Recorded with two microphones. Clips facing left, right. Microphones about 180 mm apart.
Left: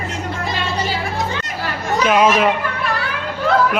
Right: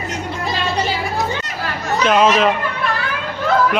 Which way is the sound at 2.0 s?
10° left (ahead or behind).